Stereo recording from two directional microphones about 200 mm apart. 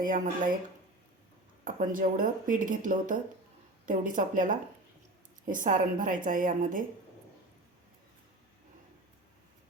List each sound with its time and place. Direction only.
0.0 s speech: 45° right (ahead or behind)
1.6 s speech: 40° right (ahead or behind)